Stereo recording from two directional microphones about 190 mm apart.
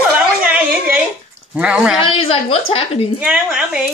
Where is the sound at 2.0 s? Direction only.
30° left (ahead or behind).